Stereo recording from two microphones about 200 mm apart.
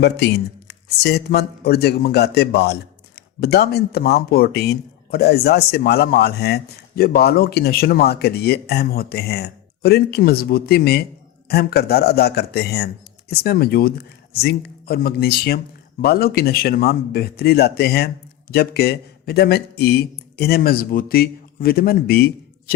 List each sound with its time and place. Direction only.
0.0 s speech: 55° left (ahead or behind)